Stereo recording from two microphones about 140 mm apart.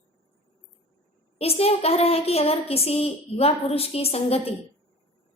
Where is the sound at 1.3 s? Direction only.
45° left (ahead or behind).